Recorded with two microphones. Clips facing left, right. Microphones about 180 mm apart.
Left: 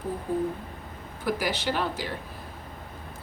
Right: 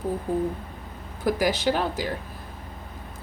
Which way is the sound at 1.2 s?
40° right (ahead or behind).